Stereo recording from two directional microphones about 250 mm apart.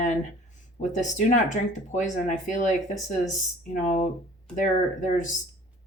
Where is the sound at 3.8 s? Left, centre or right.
Left.